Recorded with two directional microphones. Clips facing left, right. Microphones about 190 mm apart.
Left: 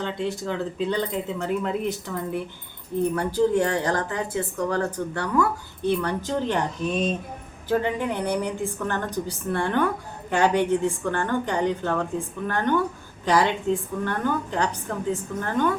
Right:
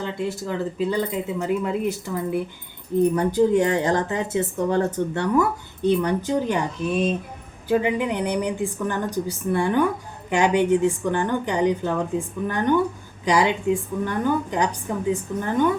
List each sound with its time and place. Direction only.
0.0 s a woman's voice: 5° right (ahead or behind)
3.2 s a woman's voice: 20° right (ahead or behind)